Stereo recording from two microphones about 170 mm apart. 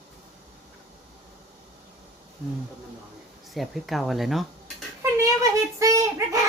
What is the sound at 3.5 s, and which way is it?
Speech, centre (ahead or behind).